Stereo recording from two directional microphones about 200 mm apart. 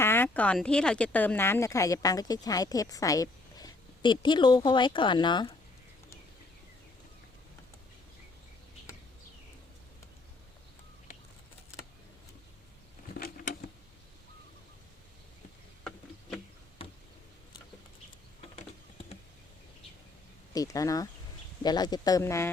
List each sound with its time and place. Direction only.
0.0 s speech: 10° left (ahead or behind)
13.1 s a sound: 50° left (ahead or behind)
20.5 s speech: 15° left (ahead or behind)